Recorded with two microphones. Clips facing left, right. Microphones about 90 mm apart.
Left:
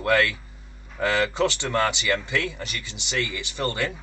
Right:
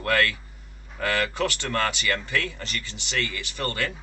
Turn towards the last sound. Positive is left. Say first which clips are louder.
# left 2 dB
turn(degrees=20)  # may be behind; listen again after turning